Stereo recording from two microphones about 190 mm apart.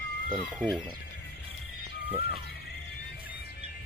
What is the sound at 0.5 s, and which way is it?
Speech, centre (ahead or behind).